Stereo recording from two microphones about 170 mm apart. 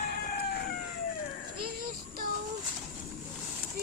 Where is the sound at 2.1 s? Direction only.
55° right (ahead or behind).